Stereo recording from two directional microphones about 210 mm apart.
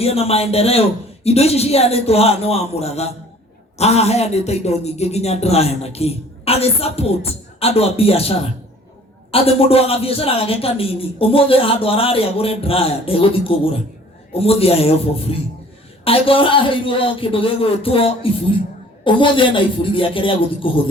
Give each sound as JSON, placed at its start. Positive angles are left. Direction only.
{"t": 0.0, "sound": "a man's voice", "side_deg": 30}
{"t": 14.3, "sound": "a man's voice", "side_deg": 25}